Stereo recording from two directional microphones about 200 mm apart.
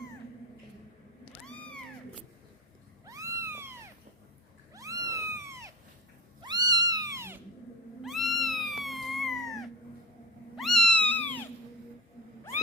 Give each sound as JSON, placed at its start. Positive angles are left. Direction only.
{"t": 1.3, "sound": "cat", "side_deg": 5}
{"t": 3.1, "sound": "cat", "side_deg": -15}
{"t": 8.0, "sound": "cat", "side_deg": 0}